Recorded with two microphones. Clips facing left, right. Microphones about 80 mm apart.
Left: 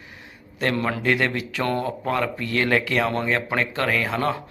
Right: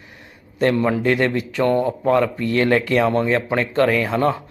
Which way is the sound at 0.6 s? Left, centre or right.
Right.